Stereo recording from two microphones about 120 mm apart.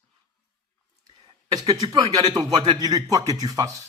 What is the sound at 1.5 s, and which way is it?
Speech, 30° right (ahead or behind).